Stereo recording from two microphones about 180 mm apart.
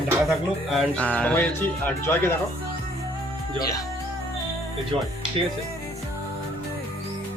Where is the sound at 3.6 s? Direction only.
20° left (ahead or behind).